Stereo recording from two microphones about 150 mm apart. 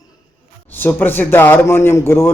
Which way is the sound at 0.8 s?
15° left (ahead or behind).